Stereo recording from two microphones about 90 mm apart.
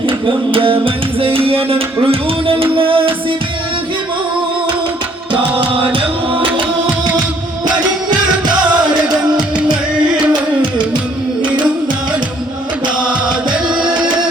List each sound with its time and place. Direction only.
0.5 s music: 80° right
1.5 s music: 25° right (ahead or behind)
2.7 s music: 80° right
5.3 s music: 65° right (ahead or behind); by 6.5 s 85° right
13.0 s music: 10° right (ahead or behind)